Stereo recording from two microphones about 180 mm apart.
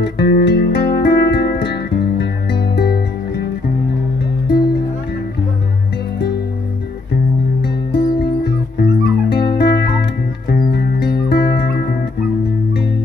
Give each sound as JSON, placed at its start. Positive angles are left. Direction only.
{"t": 0.0, "sound": "music", "side_deg": 65}
{"t": 4.5, "sound": "music", "side_deg": 65}
{"t": 7.6, "sound": "music", "side_deg": 65}